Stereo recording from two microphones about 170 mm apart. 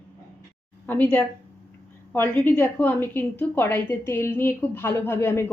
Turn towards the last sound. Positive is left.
turn(degrees=15)  # may be behind; listen again after turning